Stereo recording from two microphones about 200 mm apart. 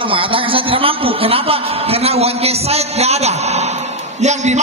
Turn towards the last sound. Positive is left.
turn(degrees=-35)  # may be behind; listen again after turning